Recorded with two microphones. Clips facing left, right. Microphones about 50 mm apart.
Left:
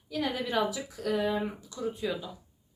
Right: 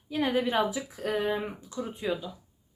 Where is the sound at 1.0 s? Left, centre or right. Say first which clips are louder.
Even; right.